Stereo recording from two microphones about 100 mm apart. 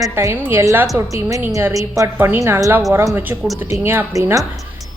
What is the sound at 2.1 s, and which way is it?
Speech, 20° right (ahead or behind).